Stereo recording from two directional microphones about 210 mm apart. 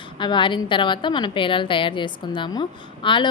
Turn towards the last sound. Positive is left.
turn(degrees=20)  # may be behind; listen again after turning